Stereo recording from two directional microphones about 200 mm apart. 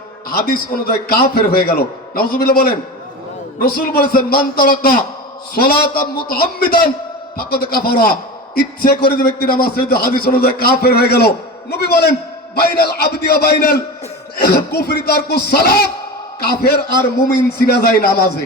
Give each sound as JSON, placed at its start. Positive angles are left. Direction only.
{"t": 0.3, "sound": "a man's voice", "side_deg": 50}